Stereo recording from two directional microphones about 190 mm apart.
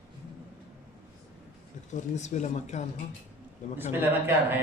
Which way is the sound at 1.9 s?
40° left (ahead or behind).